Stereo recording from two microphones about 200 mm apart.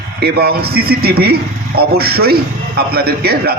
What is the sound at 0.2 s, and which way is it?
A man's voice, 50° right (ahead or behind).